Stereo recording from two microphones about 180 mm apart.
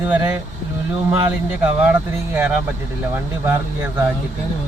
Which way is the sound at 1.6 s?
10° right (ahead or behind).